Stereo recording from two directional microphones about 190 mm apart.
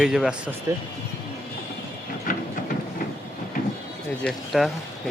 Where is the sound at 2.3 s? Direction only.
45° left (ahead or behind).